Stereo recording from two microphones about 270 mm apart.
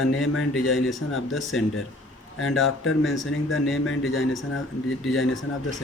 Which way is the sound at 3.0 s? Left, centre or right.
Centre.